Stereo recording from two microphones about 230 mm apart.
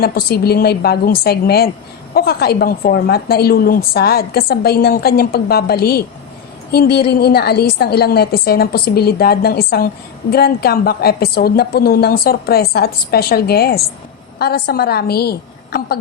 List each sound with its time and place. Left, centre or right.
0.0 s a woman's voice: left